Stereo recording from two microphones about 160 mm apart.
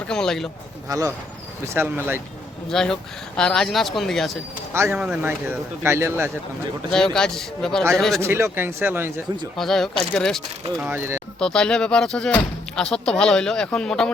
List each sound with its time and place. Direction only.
0.1 s speech: 5° left (ahead or behind)
0.9 s speech: 20° right (ahead or behind)
2.6 s speech: 5° left (ahead or behind)
4.7 s speech: 10° right (ahead or behind)
5.8 s speech: 15° right (ahead or behind)
6.9 s speech: 5° left (ahead or behind)
8.2 s speech: 15° right (ahead or behind)
9.6 s speech: centre (ahead or behind)
10.8 s speech: 10° right (ahead or behind)
11.3 s speech: 5° left (ahead or behind)